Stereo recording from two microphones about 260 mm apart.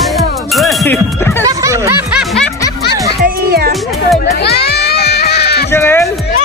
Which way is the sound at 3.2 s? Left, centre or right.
Right.